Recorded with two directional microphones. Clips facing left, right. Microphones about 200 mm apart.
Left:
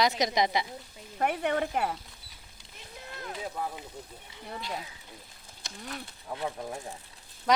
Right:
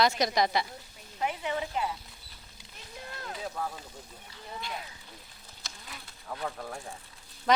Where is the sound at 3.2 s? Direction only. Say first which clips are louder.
Left 1 dB; 15° left (ahead or behind).